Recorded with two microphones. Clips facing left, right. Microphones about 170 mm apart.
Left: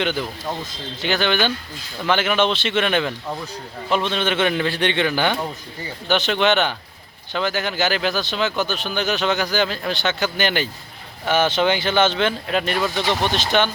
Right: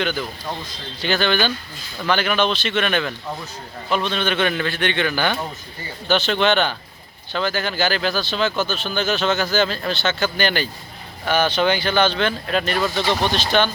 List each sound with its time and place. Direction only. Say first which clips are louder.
0.0 s speech: left 1 dB; 25° left (ahead or behind)